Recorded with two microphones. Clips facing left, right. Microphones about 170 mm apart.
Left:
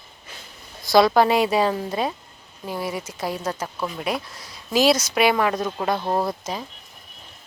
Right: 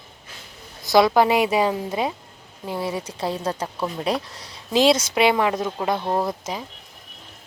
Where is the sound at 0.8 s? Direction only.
15° right (ahead or behind).